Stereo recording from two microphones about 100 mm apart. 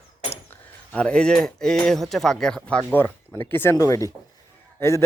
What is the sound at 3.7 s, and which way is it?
A man's voice, 35° left (ahead or behind).